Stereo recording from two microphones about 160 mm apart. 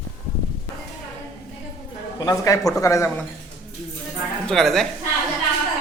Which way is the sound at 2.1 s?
20° left (ahead or behind).